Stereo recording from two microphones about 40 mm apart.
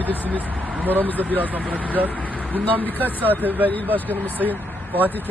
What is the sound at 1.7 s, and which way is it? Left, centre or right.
Speech, left.